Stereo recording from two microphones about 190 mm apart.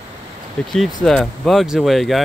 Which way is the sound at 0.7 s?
Centre (ahead or behind).